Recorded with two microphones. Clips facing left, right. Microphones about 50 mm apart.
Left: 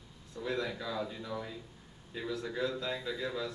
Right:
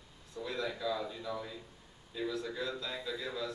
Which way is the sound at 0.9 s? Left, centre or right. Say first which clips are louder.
Right 1 dB; centre.